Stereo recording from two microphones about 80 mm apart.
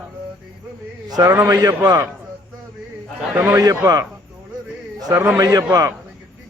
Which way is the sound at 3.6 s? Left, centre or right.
Right.